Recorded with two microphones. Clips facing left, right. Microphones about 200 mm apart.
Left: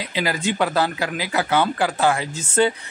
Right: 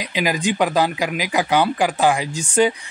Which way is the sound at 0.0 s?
15° right (ahead or behind).